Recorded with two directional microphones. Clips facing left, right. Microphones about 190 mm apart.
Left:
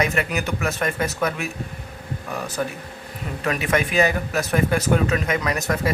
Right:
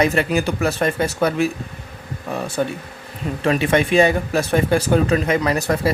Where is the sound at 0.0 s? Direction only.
30° right (ahead or behind).